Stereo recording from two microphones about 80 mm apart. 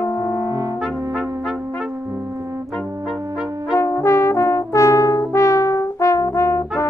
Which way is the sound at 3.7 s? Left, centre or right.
Left.